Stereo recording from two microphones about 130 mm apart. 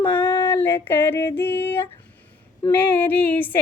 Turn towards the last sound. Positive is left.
turn(degrees=15)  # may be behind; listen again after turning